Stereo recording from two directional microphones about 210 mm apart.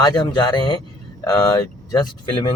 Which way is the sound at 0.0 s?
20° left (ahead or behind).